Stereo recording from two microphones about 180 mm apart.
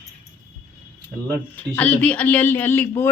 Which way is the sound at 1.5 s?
10° left (ahead or behind).